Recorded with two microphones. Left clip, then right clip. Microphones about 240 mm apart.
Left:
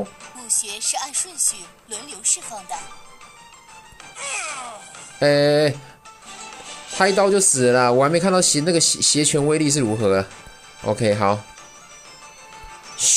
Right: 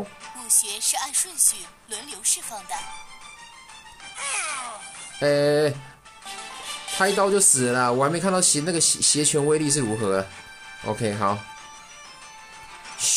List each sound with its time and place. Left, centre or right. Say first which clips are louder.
0.5 s music: left 1 dB; centre
4.2 s music: left 1 dB; centre
5.2 s speech: left 4 dB; centre
7.0 s speech: left 4 dB; centre
13.0 s music: left 5 dB; centre